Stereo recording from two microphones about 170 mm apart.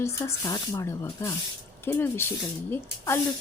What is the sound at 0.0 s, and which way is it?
Speech, 15° left (ahead or behind).